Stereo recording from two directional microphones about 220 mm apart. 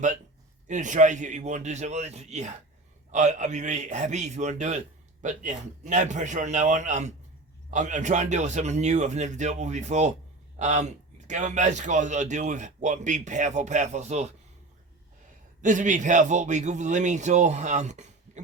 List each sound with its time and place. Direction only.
0.7 s a man's voice: 35° right (ahead or behind)
15.6 s a man's voice: 35° right (ahead or behind)